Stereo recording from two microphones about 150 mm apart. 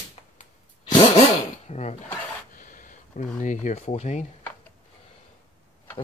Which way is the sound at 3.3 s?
55° left (ahead or behind).